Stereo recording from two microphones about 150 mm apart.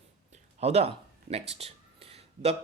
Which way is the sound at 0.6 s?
45° right (ahead or behind).